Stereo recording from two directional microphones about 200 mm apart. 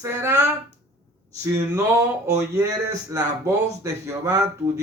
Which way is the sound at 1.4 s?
15° right (ahead or behind).